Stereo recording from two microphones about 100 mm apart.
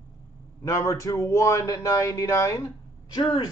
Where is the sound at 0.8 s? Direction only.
35° left (ahead or behind).